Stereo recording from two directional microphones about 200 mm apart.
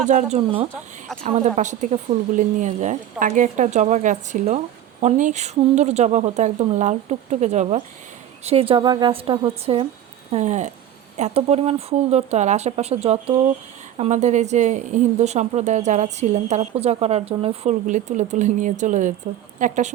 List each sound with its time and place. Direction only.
0.0 s a woman's voice: 35° right (ahead or behind)